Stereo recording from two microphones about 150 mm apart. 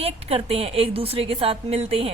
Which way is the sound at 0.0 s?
40° right (ahead or behind).